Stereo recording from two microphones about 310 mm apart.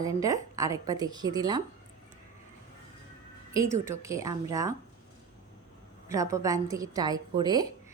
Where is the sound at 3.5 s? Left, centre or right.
Centre.